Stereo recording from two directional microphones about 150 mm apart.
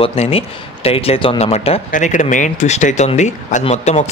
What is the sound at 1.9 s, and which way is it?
Speech, 55° left (ahead or behind).